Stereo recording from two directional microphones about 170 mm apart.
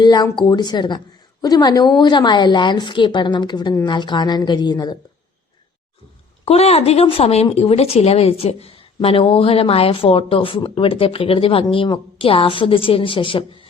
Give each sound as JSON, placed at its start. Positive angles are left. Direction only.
{"t": 0.0, "sound": "a woman's voice", "side_deg": 25}
{"t": 6.4, "sound": "speech", "side_deg": 35}